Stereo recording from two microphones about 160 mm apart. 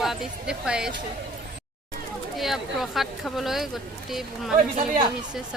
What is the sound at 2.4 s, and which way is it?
A woman's voice, centre (ahead or behind).